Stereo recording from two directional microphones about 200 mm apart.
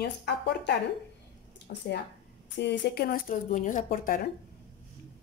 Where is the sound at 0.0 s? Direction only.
55° left (ahead or behind).